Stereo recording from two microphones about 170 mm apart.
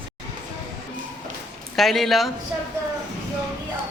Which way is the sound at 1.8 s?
Centre (ahead or behind).